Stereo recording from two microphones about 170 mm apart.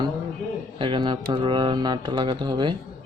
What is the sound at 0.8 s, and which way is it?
Speech, 30° right (ahead or behind).